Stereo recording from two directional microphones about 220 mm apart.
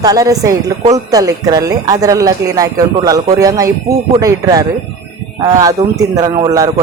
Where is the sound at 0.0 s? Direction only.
15° right (ahead or behind).